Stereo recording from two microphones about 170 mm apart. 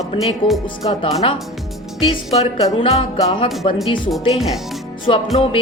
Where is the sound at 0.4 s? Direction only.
30° left (ahead or behind).